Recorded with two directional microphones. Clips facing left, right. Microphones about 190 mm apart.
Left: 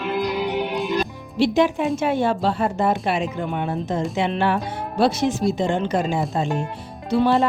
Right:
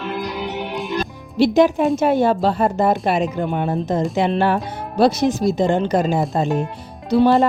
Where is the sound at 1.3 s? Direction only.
40° right (ahead or behind).